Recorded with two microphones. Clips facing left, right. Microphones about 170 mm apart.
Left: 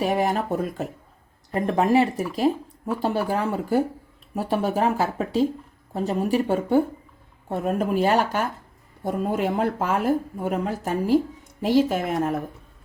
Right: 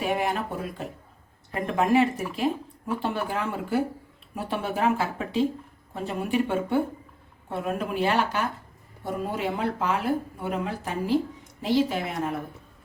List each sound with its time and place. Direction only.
0.0 s speech: 40° left (ahead or behind)